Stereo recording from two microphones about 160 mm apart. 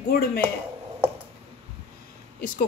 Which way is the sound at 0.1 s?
75° left (ahead or behind).